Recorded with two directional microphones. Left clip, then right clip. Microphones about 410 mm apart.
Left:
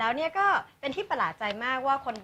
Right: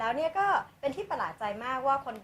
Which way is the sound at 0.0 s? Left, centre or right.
Left.